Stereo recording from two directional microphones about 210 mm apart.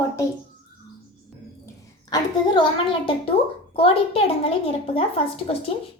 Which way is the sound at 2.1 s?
20° left (ahead or behind).